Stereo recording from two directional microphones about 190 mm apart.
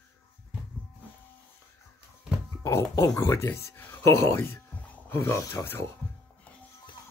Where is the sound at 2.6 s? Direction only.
15° left (ahead or behind).